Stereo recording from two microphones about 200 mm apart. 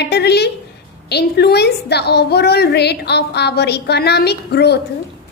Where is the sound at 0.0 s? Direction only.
55° left (ahead or behind).